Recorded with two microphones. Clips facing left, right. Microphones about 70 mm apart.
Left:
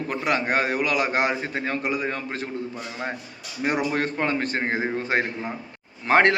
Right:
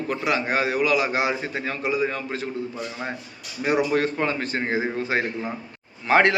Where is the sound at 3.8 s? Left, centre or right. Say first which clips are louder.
Right 4 dB; left.